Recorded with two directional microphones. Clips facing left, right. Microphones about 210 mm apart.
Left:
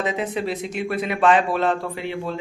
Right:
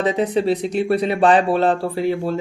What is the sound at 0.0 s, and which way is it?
Speech, 35° right (ahead or behind).